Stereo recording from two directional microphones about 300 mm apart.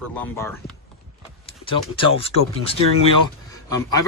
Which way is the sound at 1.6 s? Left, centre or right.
Centre.